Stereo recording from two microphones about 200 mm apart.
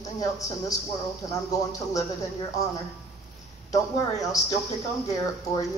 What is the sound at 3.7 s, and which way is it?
A man's voice, 15° left (ahead or behind).